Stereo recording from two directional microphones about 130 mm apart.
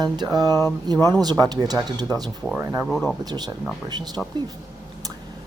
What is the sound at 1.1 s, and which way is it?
Speech, 30° right (ahead or behind).